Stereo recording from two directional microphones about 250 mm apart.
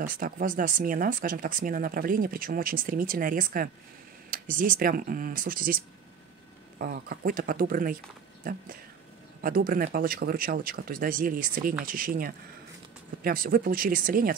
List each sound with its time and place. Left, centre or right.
0.0 s speech: right
6.8 s speech: right
9.4 s speech: right